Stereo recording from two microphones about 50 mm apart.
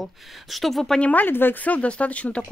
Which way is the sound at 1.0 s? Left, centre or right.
Left.